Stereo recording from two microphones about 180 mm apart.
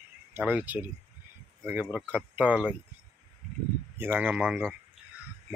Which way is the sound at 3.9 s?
10° right (ahead or behind).